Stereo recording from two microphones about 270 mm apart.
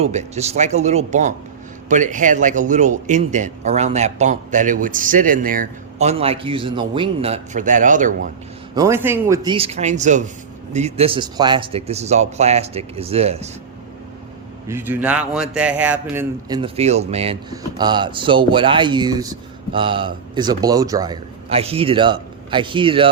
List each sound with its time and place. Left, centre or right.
0.0 s a man's voice: right
8.7 s a man's voice: centre
14.7 s a man's voice: centre